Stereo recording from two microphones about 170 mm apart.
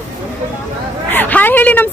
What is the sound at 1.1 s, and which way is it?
Speech, 10° left (ahead or behind).